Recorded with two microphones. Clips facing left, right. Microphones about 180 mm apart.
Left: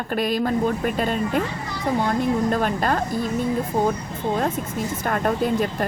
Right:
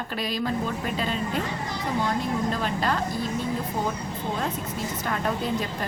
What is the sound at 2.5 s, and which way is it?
Speech, 50° left (ahead or behind).